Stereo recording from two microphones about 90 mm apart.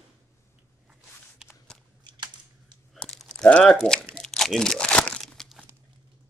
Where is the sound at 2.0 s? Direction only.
55° right (ahead or behind).